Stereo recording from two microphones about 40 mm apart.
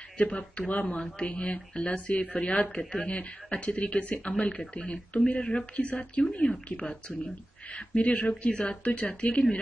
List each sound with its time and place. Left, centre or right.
0.2 s speech: left
2.4 s a woman's voice: left
7.7 s a woman's voice: left